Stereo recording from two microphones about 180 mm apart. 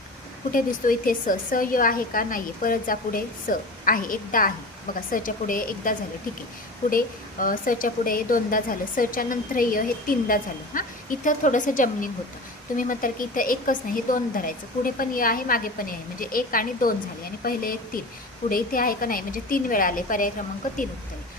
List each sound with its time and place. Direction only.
0.5 s speech: 50° left (ahead or behind)
6.9 s speech: 50° left (ahead or behind)